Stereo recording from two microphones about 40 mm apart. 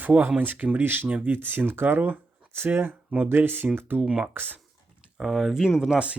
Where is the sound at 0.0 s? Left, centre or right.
Right.